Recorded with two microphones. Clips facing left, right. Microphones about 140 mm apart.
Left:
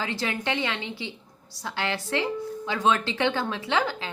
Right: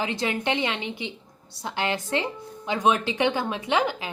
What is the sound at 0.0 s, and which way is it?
A woman's voice, 20° right (ahead or behind).